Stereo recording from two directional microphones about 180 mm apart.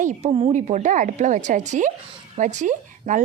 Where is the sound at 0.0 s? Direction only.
35° right (ahead or behind).